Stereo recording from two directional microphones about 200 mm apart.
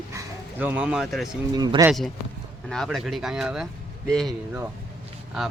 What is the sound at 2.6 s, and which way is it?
Speech, centre (ahead or behind).